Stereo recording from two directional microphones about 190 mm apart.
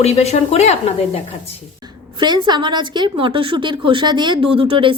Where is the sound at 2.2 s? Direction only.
25° right (ahead or behind).